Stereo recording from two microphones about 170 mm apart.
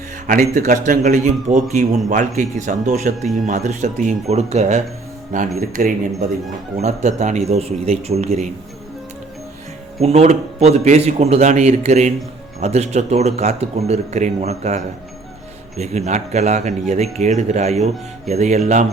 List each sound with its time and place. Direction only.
0.3 s a man's voice: 50° right (ahead or behind)
5.5 s speech: 55° right (ahead or behind)
6.8 s a man's voice: 45° right (ahead or behind)
10.0 s a man's voice: 40° right (ahead or behind)